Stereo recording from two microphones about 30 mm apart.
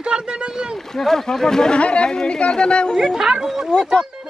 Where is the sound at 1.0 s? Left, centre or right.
Centre.